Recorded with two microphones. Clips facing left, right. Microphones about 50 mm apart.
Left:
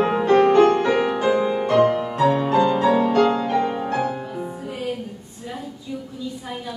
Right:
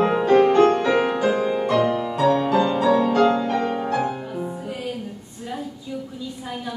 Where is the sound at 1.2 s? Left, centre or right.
Centre.